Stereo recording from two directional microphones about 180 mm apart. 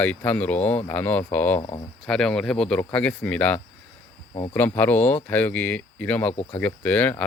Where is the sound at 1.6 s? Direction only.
25° left (ahead or behind).